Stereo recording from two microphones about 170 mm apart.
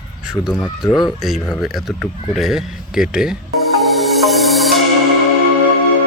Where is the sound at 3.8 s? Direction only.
Centre (ahead or behind).